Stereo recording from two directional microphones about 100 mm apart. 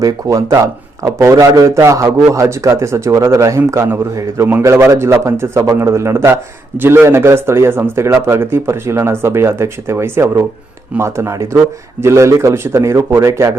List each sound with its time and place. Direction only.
0.0 s a man's voice: 35° right (ahead or behind)